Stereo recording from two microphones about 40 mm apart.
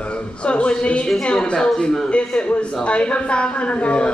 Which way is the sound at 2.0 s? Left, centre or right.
Left.